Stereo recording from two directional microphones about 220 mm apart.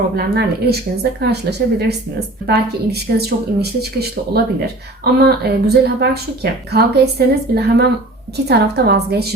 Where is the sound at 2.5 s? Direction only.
45° right (ahead or behind).